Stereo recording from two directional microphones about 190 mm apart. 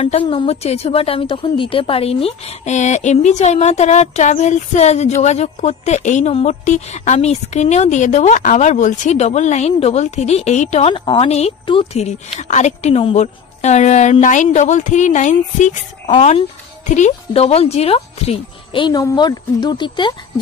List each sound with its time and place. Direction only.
0.3 s a woman's voice: 35° left (ahead or behind)